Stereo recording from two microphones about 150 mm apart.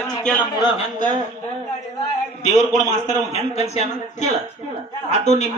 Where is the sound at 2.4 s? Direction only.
50° left (ahead or behind).